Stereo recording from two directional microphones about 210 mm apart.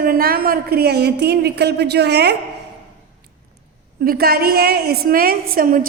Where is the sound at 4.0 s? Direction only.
45° right (ahead or behind).